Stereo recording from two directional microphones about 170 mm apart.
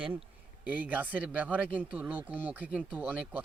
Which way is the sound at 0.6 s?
10° right (ahead or behind).